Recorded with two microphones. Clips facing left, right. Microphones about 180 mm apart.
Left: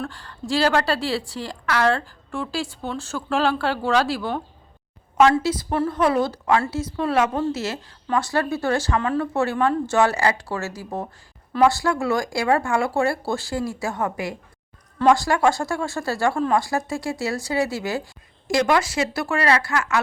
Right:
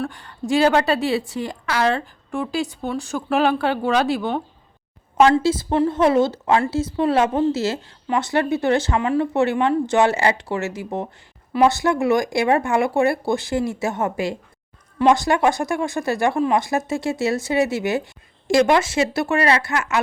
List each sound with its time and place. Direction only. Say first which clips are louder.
0.1 s speech: right 4 dB; 20° right (ahead or behind)